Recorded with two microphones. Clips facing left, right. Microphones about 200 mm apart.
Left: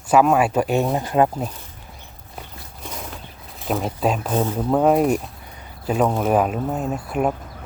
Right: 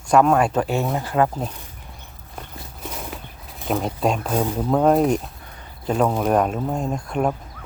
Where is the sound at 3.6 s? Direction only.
Centre (ahead or behind).